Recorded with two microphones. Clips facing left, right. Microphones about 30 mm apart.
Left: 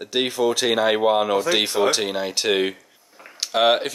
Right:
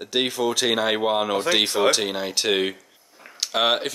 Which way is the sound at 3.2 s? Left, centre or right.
Centre.